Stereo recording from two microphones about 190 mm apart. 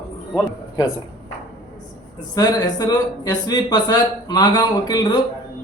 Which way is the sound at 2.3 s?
20° left (ahead or behind).